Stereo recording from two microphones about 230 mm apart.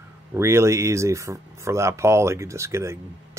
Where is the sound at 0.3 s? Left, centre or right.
Centre.